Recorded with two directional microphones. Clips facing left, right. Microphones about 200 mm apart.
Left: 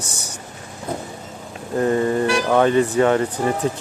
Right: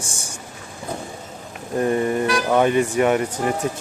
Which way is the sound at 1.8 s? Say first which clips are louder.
Left 2 dB; 20° right (ahead or behind).